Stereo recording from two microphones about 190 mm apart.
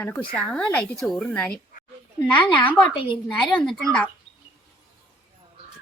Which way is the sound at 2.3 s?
25° left (ahead or behind).